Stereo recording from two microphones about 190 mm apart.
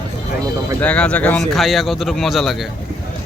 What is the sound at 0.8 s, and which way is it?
Speech, 5° left (ahead or behind).